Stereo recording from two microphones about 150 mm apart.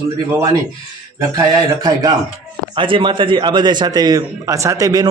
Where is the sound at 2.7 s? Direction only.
35° right (ahead or behind).